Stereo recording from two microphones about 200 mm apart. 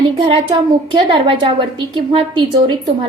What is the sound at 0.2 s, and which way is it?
A woman's voice, 25° right (ahead or behind).